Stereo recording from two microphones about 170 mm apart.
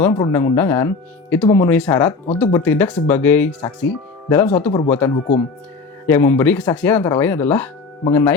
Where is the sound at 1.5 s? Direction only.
20° left (ahead or behind).